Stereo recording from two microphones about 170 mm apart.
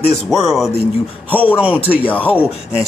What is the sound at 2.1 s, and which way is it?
Speech, 10° left (ahead or behind).